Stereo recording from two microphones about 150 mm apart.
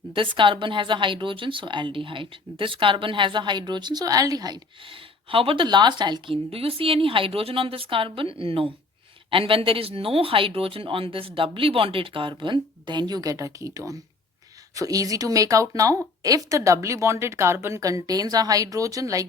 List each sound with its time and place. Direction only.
0.1 s speech: 35° right (ahead or behind)